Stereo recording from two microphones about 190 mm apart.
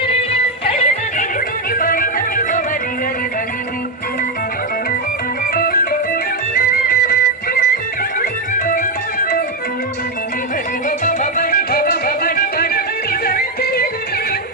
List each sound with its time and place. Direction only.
0.6 s music: 35° left (ahead or behind)
1.8 s music: 50° left (ahead or behind)
5.5 s music: 50° left (ahead or behind)
10.8 s music: 40° left (ahead or behind)